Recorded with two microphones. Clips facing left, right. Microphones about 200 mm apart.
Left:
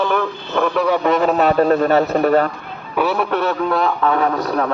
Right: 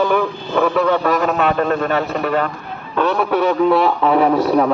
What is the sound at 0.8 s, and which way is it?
Speech, 10° left (ahead or behind).